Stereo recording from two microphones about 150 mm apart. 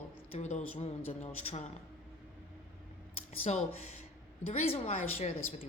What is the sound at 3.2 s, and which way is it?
A woman's voice, 45° left (ahead or behind).